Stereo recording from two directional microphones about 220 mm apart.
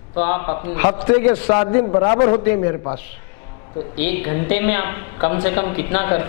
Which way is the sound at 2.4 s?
15° left (ahead or behind).